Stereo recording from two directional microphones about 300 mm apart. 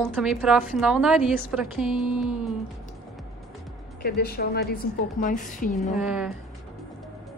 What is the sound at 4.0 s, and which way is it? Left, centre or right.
A woman's voice, left.